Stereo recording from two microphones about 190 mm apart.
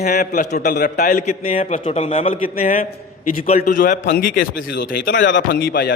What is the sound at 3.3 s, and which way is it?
A man's voice, 45° left (ahead or behind).